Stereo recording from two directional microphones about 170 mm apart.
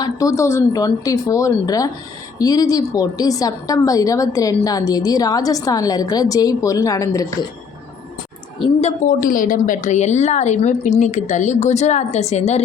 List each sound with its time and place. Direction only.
0.0 s a woman's voice: 20° left (ahead or behind)
9.0 s a woman's voice: 55° left (ahead or behind)